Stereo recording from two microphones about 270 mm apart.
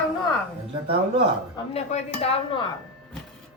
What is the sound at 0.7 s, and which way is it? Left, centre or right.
Speech, centre.